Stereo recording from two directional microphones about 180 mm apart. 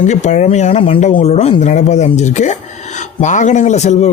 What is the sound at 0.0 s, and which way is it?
Speech, 40° left (ahead or behind).